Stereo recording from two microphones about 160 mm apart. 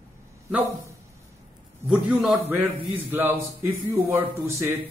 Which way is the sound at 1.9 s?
10° right (ahead or behind).